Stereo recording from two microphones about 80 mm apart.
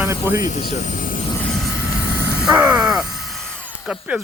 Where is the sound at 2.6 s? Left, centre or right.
Centre.